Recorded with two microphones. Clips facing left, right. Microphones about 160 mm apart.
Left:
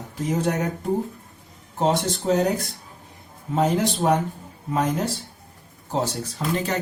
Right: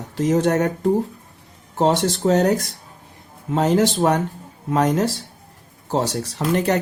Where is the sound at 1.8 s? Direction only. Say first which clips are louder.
Right 4 dB; 75° right (ahead or behind).